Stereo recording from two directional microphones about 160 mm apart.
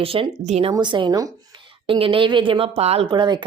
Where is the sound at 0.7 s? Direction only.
30° right (ahead or behind).